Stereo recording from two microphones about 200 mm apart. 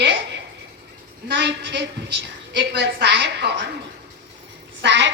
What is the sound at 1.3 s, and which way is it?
A woman's voice, 60° right (ahead or behind).